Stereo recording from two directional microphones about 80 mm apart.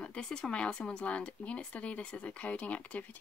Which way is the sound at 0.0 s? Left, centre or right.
Centre.